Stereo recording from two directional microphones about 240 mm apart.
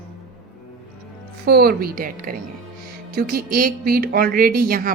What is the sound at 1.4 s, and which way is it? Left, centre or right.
A woman's voice, right.